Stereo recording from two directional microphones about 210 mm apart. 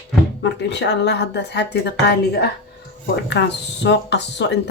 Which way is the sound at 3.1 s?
55° left (ahead or behind).